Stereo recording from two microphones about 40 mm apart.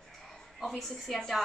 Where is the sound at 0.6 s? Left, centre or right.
Centre.